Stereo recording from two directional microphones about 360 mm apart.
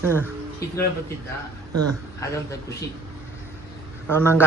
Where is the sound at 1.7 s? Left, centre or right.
Right.